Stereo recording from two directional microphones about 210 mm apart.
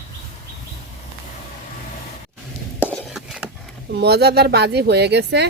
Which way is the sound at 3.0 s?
Centre (ahead or behind).